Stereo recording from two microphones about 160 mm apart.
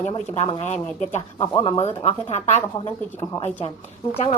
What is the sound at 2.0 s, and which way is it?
Speech, 45° left (ahead or behind).